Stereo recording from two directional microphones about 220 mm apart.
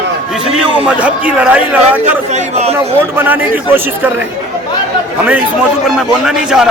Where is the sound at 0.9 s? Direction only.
5° right (ahead or behind).